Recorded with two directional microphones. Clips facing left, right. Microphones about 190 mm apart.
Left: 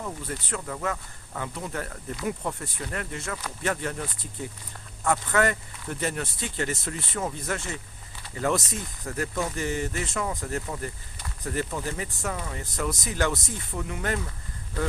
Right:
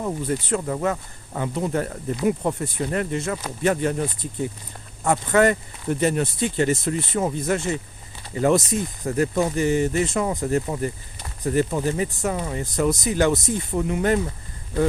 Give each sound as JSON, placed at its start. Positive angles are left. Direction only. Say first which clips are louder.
{"t": 0.0, "sound": "speech", "louder": "right 9 dB", "side_deg": -25}